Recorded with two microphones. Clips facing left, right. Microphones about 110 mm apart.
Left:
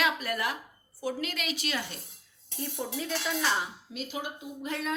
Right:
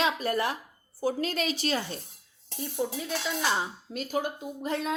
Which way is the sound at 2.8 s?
5° right (ahead or behind).